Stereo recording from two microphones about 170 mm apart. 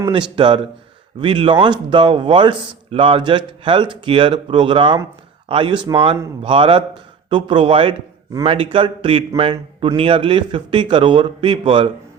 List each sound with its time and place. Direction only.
0.1 s a man's voice: 30° right (ahead or behind)